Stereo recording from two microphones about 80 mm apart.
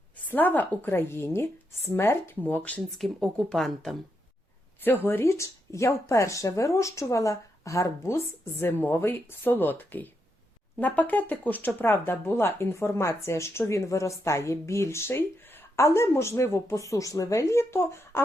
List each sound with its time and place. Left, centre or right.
0.3 s a woman's voice: left
3.0 s speech: centre
5.0 s speech: left
16.9 s speech: left